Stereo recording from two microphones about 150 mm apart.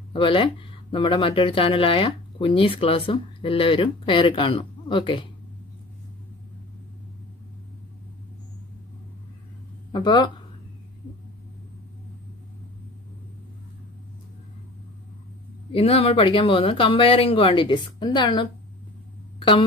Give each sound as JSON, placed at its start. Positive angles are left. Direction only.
{"t": 0.1, "sound": "speech", "side_deg": 35}
{"t": 9.9, "sound": "speech", "side_deg": 30}
{"t": 15.7, "sound": "speech", "side_deg": 40}